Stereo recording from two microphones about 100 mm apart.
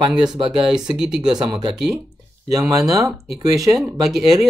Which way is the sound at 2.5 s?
35° right (ahead or behind).